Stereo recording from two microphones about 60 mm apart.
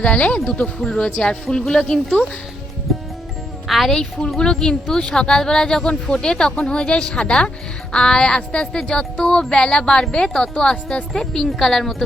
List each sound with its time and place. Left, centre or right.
0.0 s speech: centre
0.8 s speech: centre
1.0 s speech: centre
2.9 s music: centre
3.7 s a woman's voice: centre
4.4 s speech: centre